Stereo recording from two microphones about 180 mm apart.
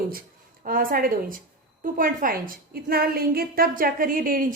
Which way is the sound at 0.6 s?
50° right (ahead or behind).